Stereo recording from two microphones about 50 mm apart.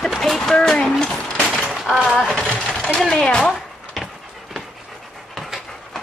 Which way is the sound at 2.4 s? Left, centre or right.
Left.